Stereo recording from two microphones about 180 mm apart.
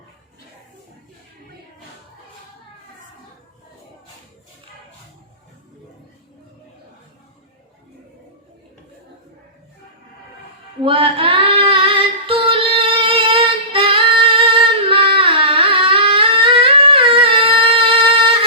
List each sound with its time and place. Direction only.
10.8 s female singing: 30° right (ahead or behind)